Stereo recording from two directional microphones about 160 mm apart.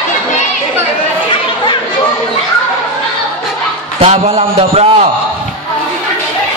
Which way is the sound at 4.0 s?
40° right (ahead or behind).